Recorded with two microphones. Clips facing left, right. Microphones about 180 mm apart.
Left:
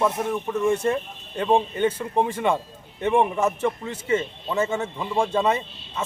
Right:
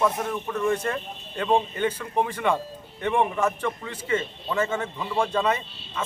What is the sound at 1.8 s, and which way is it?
A man's voice, 25° left (ahead or behind).